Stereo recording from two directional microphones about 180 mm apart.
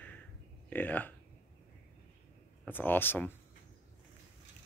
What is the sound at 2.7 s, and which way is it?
Speech, 10° left (ahead or behind).